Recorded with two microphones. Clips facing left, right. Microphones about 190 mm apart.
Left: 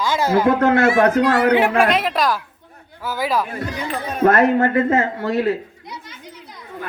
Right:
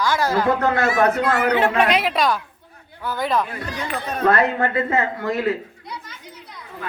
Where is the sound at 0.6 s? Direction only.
55° left (ahead or behind).